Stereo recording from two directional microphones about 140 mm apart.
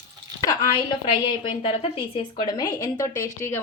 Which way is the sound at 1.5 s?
40° left (ahead or behind).